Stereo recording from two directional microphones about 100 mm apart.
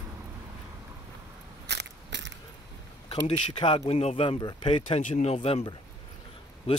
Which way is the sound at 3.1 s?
60° left (ahead or behind).